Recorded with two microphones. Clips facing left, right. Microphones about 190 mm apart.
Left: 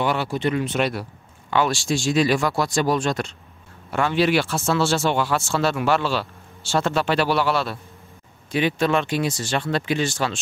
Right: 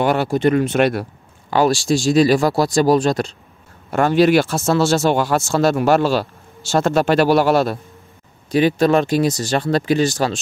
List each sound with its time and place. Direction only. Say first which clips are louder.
0.0 s speech: right 6 dB; 45° right (ahead or behind)
1.5 s speech: right 6 dB; 35° right (ahead or behind)